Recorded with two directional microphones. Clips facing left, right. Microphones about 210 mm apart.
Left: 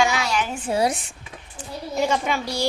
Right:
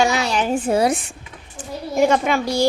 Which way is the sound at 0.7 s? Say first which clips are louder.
Right 1 dB; 55° right (ahead or behind).